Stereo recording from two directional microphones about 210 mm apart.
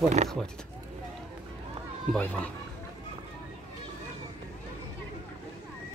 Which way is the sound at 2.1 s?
10° left (ahead or behind).